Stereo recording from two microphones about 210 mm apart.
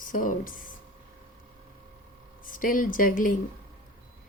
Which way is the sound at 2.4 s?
40° left (ahead or behind).